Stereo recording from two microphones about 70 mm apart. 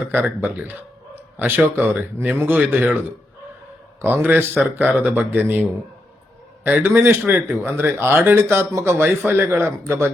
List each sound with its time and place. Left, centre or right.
0.1 s a man's voice: right
4.0 s speech: right
6.7 s speech: right